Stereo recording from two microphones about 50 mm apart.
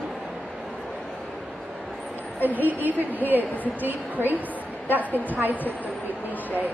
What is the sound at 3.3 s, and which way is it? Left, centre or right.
A woman's voice, right.